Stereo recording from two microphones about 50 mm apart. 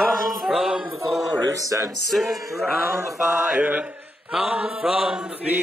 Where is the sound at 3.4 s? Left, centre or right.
Right.